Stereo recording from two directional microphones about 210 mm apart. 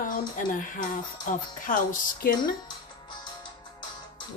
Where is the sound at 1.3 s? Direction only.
40° left (ahead or behind).